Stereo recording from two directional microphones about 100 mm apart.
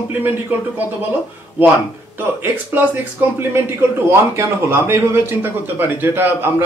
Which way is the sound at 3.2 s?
20° right (ahead or behind).